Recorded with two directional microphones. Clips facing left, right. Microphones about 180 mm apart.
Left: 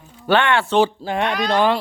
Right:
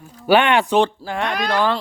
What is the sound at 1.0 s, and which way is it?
Speech, 20° left (ahead or behind).